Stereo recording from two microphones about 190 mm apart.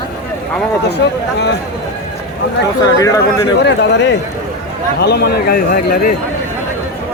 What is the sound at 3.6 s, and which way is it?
A man's voice, 65° left (ahead or behind).